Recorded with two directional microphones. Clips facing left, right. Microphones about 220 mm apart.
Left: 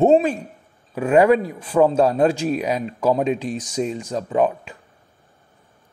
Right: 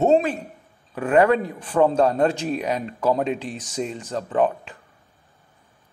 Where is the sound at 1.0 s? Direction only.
10° left (ahead or behind).